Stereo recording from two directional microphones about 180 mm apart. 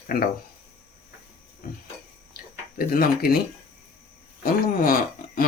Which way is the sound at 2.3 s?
55° left (ahead or behind).